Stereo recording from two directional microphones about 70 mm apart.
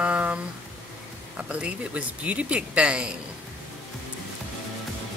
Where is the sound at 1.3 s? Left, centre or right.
Centre.